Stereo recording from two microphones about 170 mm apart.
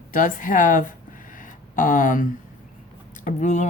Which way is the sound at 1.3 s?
50° left (ahead or behind).